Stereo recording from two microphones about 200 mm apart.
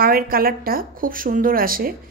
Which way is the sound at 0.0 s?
45° right (ahead or behind).